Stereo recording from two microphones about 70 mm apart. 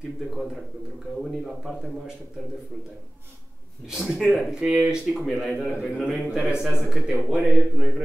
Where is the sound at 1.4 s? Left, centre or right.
Centre.